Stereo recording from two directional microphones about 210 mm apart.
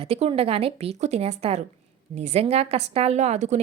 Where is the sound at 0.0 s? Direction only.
25° right (ahead or behind).